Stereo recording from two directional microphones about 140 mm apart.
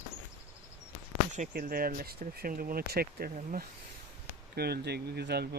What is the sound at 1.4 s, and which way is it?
Speech, 80° right.